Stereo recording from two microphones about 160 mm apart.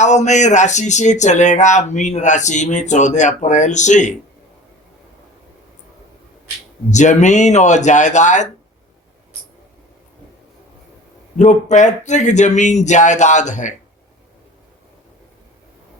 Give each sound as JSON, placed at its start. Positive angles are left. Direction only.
{"t": 0.0, "sound": "speech", "side_deg": 45}
{"t": 6.9, "sound": "speech", "side_deg": 50}
{"t": 11.3, "sound": "speech", "side_deg": 50}